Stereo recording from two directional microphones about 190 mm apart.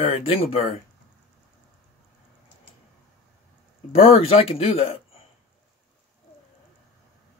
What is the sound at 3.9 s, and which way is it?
Speech, 30° left (ahead or behind).